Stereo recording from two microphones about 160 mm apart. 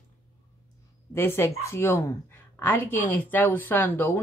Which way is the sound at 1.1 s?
15° left (ahead or behind).